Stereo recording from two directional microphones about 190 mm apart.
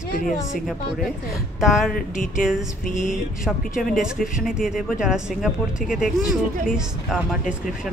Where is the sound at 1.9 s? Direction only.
45° left (ahead or behind).